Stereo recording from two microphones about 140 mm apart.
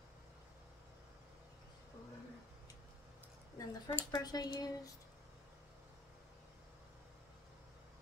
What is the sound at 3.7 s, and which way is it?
Speech, 30° left (ahead or behind).